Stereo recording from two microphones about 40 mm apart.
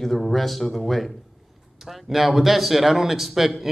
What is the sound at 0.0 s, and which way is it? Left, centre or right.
Speech, centre.